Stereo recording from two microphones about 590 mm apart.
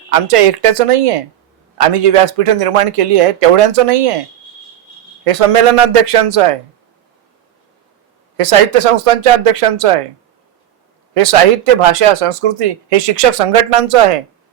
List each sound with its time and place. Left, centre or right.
0.1 s speech: right
5.2 s speech: right
8.4 s speech: right
11.1 s speech: right